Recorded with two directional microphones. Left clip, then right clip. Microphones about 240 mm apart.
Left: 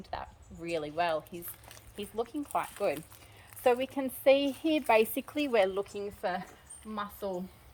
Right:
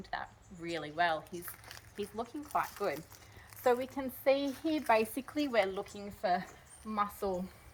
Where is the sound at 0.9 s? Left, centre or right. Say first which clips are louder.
Even; left.